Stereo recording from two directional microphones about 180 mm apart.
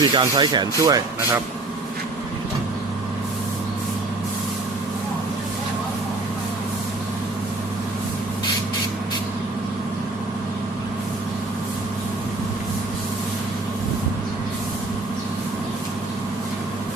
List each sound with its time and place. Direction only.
0.0 s speech: 25° right (ahead or behind)